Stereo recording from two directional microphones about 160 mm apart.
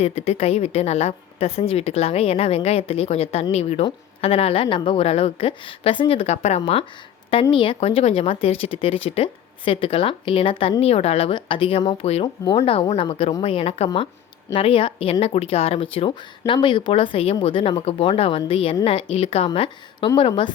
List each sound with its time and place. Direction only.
0.0 s speech: 40° left (ahead or behind)
7.5 s speech: 30° left (ahead or behind)